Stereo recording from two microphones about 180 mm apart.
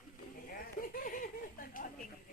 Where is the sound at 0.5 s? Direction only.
50° left (ahead or behind).